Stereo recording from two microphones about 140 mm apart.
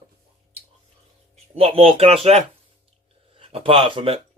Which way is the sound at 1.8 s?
45° right (ahead or behind).